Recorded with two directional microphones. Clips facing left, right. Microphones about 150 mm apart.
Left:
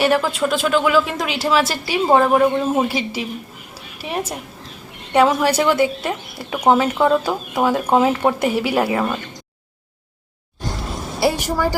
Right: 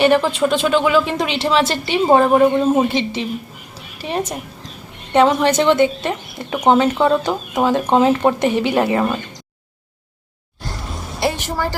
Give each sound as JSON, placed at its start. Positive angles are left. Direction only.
{"t": 0.0, "sound": "a woman's voice", "side_deg": 5}
{"t": 11.2, "sound": "vehicle", "side_deg": 10}